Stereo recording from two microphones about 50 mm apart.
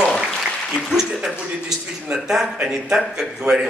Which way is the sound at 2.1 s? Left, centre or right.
Centre.